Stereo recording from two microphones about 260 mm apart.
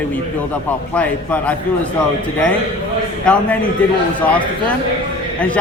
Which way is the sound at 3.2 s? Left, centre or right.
Centre.